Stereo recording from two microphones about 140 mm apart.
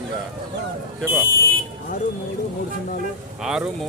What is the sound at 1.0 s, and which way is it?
Speech, 15° right (ahead or behind).